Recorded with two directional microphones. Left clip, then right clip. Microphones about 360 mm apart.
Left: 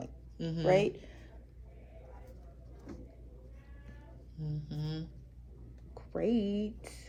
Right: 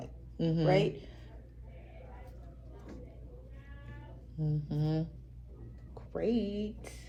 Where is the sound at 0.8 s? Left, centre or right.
Left.